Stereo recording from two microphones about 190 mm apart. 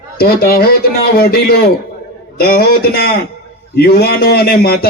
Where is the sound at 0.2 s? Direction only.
55° left (ahead or behind).